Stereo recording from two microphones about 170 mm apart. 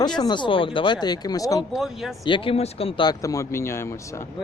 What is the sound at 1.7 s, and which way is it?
Speech, centre (ahead or behind).